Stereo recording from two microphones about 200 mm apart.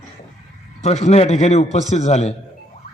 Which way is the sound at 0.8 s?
35° left (ahead or behind).